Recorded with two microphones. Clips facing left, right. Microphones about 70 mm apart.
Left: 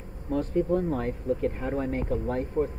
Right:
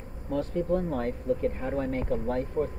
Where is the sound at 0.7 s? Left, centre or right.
Left.